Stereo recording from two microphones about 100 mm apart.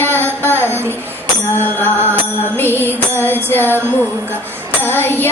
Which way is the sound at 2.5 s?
20° left (ahead or behind).